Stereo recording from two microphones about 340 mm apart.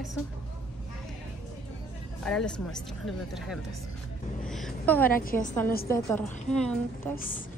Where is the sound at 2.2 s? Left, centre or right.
Centre.